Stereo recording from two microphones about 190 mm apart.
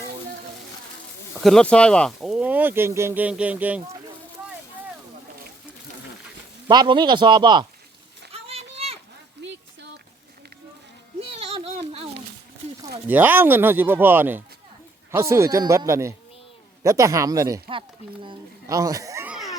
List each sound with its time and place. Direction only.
1.4 s speech: centre (ahead or behind)
6.7 s speech: 25° right (ahead or behind)
8.3 s a sound: 35° right (ahead or behind)
11.2 s a sound: 30° right (ahead or behind)
13.1 s speech: 10° right (ahead or behind)
19.3 s crowd: centre (ahead or behind)